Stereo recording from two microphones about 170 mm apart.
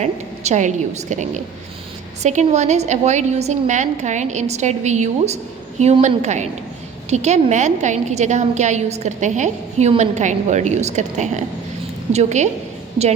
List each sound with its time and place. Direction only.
0.0 s a woman's voice: 45° right (ahead or behind)